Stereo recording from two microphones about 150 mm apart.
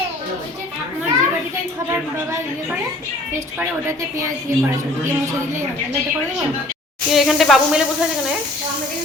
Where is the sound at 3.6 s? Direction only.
20° right (ahead or behind).